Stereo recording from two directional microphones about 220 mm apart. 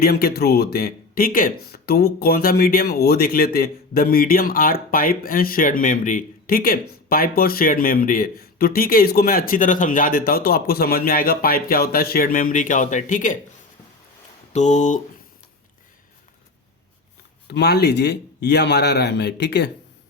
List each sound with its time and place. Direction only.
0.0 s a man's voice: 45° left (ahead or behind)
14.5 s speech: 30° left (ahead or behind)
17.5 s a man's voice: 50° left (ahead or behind)